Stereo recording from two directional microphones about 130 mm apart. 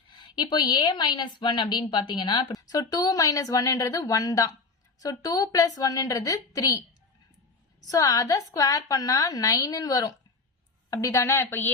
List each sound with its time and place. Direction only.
0.1 s a woman's voice: 35° left (ahead or behind)
7.8 s a woman's voice: 30° left (ahead or behind)